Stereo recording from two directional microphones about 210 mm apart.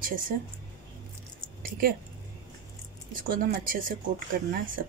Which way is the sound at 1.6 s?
45° right (ahead or behind).